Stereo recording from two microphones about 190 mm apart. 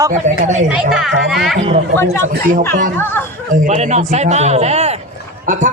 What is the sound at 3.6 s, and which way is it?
A man's voice, 40° right (ahead or behind).